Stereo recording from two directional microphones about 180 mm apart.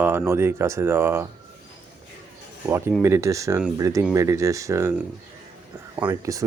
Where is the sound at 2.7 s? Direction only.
15° right (ahead or behind).